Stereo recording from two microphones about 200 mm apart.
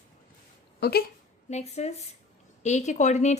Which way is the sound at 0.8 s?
55° left (ahead or behind).